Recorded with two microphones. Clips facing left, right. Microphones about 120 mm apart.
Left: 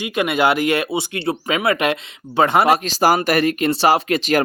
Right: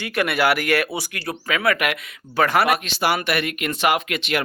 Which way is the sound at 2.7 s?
40° left (ahead or behind).